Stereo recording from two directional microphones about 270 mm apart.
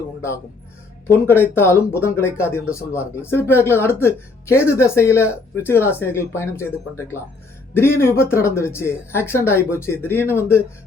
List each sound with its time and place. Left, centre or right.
1.3 s speech: centre